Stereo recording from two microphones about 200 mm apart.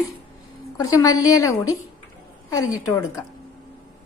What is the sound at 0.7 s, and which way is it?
A woman's voice, 15° left (ahead or behind).